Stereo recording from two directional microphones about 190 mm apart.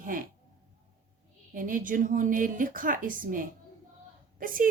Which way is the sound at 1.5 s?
45° right (ahead or behind).